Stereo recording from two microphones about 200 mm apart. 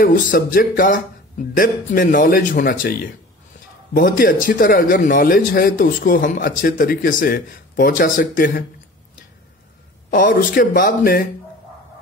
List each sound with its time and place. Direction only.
0.0 s a man's voice: 45° left (ahead or behind)
10.1 s a man's voice: 45° left (ahead or behind)